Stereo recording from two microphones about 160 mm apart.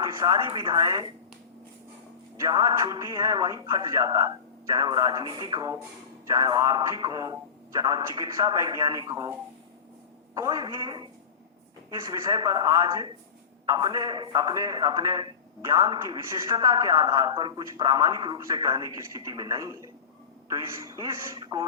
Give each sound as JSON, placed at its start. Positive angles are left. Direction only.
{"t": 0.0, "sound": "a man's voice", "side_deg": -20}
{"t": 2.4, "sound": "a man's voice", "side_deg": -20}
{"t": 10.3, "sound": "a man's voice", "side_deg": -20}
{"t": 21.3, "sound": "a man's voice", "side_deg": -30}